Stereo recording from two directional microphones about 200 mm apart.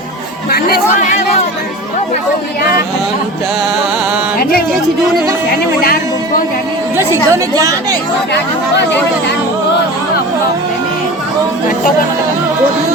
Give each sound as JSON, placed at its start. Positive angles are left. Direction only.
{"t": 0.5, "sound": "speech", "side_deg": 50}
{"t": 5.5, "sound": "speech", "side_deg": 50}
{"t": 6.9, "sound": "a woman's voice", "side_deg": -15}
{"t": 8.3, "sound": "speech", "side_deg": 60}